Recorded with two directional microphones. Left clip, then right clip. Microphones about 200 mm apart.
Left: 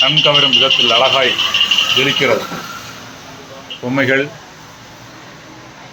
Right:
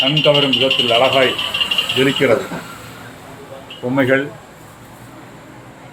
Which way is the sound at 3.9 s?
5° left (ahead or behind).